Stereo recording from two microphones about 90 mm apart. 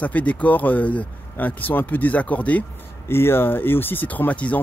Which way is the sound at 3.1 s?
25° left (ahead or behind).